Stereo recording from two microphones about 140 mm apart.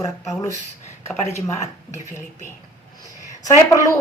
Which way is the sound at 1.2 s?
20° left (ahead or behind).